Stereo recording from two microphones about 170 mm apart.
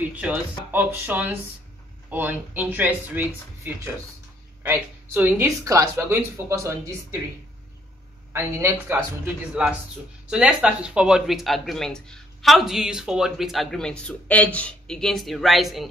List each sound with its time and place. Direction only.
0.0 s a woman's voice: 10° right (ahead or behind)
8.3 s a woman's voice: 15° right (ahead or behind)